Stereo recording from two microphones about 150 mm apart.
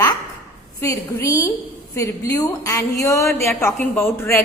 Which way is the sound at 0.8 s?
20° left (ahead or behind).